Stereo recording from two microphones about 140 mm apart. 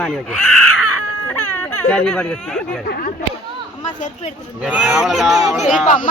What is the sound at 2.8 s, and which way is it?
Speech, 90° left.